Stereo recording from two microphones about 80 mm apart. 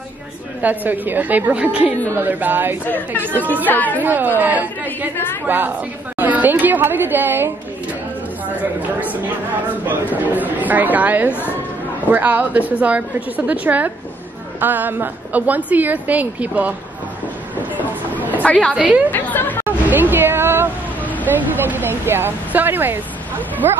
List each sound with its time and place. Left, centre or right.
0.6 s a woman's voice: right
2.9 s speech: left
3.3 s a woman's voice: right
3.6 s speech: left
4.0 s a woman's voice: right
5.1 s speech: left
5.5 s a woman's voice: right
9.8 s a woman's voice: right
18.4 s speech: centre
18.8 s speech: centre
19.0 s speech: left
19.6 s a sound: right
21.6 s a woman's voice: right